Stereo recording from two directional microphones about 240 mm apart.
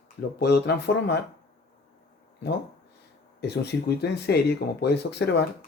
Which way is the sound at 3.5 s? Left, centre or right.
Left.